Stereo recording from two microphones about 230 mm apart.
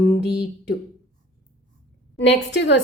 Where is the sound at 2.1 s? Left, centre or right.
Left.